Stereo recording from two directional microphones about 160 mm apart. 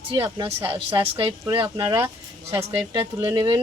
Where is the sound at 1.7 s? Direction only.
15° right (ahead or behind).